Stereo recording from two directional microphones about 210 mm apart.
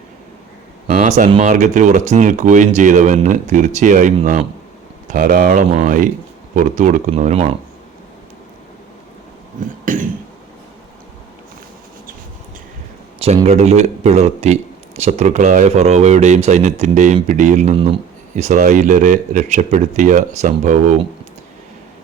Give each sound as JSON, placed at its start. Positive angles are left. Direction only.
{"t": 0.9, "sound": "speech", "side_deg": -35}
{"t": 9.6, "sound": "cough", "side_deg": -40}
{"t": 13.2, "sound": "speech", "side_deg": -30}